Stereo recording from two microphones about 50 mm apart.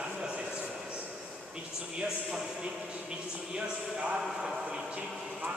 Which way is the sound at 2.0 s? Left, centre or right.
Centre.